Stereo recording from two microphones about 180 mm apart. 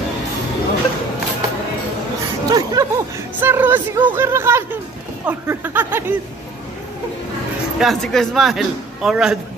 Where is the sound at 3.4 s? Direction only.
10° right (ahead or behind).